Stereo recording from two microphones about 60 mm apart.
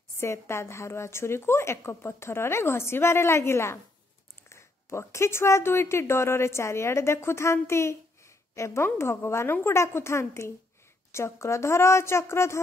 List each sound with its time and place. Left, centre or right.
0.2 s a woman's voice: left